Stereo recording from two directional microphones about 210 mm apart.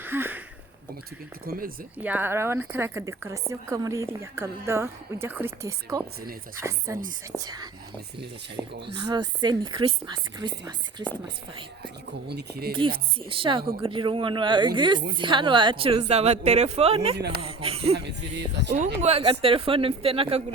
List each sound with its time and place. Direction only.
0.0 s a sound: 10° right (ahead or behind)
1.5 s speech: 45° right (ahead or behind)
2.0 s a woman's voice: 10° right (ahead or behind)
8.6 s speech: 20° left (ahead or behind)
9.0 s a woman's voice: 20° right (ahead or behind)
12.3 s speech: 50° right (ahead or behind)
12.7 s a woman's voice: 25° right (ahead or behind)
17.2 s speech: 50° right (ahead or behind)
17.4 s a woman's voice: 25° right (ahead or behind)
17.9 s speech: 55° right (ahead or behind)
19.0 s a woman's voice: 30° right (ahead or behind)